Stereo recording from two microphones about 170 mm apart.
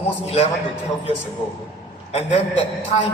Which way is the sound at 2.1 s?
35° left (ahead or behind).